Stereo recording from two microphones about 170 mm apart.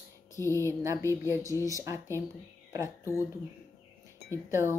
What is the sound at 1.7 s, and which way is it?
Speech, 15° right (ahead or behind).